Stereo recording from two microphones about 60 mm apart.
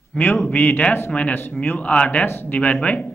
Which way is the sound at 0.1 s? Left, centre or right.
Left.